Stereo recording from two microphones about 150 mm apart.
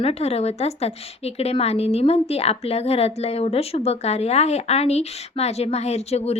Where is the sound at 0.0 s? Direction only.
45° left (ahead or behind).